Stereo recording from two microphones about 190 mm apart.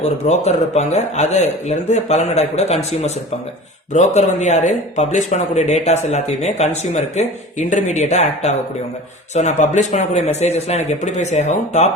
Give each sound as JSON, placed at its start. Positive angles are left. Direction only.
{"t": 0.0, "sound": "speech", "side_deg": 35}